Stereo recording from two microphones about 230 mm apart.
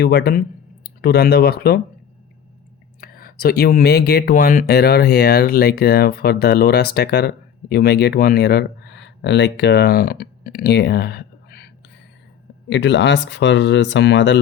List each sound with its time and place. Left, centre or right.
0.0 s speech: left
3.0 s speech: left